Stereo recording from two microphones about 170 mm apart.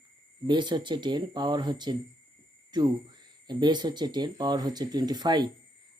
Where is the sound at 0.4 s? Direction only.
25° right (ahead or behind).